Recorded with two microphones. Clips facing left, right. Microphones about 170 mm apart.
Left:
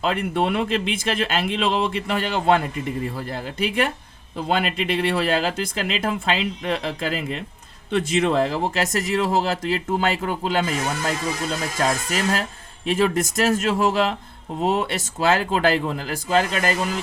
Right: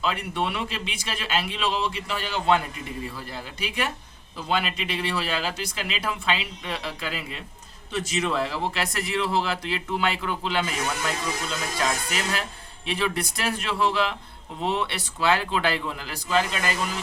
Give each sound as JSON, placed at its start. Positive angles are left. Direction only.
{"t": 0.0, "sound": "speech", "side_deg": 50}
{"t": 7.9, "sound": "speech", "side_deg": 55}